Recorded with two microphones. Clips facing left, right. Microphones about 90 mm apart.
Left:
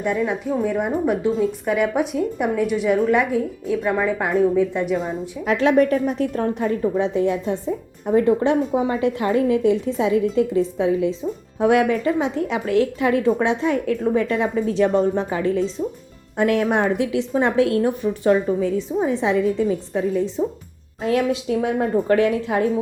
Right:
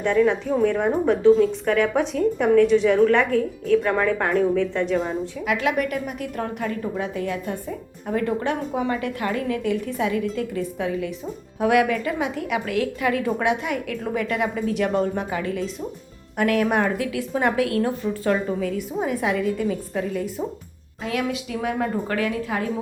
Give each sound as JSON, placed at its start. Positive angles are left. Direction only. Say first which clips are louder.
{"t": 0.0, "sound": "a woman's voice", "louder": "right 3 dB", "side_deg": 10}
{"t": 5.5, "sound": "a woman's voice", "louder": "left 7 dB", "side_deg": 30}